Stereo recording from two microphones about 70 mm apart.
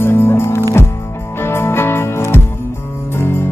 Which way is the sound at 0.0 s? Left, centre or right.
Left.